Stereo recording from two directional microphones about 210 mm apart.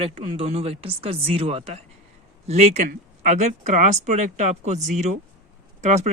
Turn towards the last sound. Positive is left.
turn(degrees=-35)  # may be behind; listen again after turning